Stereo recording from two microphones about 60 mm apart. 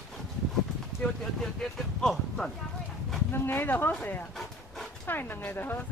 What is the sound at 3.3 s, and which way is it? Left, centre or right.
Speech, left.